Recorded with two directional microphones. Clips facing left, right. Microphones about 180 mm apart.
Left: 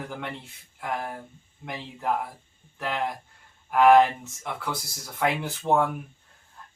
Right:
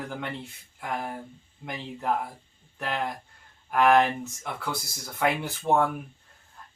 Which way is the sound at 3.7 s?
Centre (ahead or behind).